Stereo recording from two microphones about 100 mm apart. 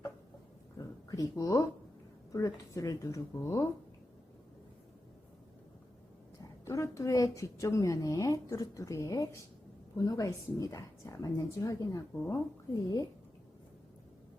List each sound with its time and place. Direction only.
0.8 s a sound: 40° left (ahead or behind)
2.3 s a woman's voice: 35° left (ahead or behind)
6.7 s a woman's voice: 30° left (ahead or behind)
12.1 s a woman's voice: 20° left (ahead or behind)